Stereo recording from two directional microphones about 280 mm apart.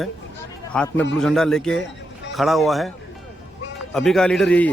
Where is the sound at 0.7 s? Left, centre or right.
Centre.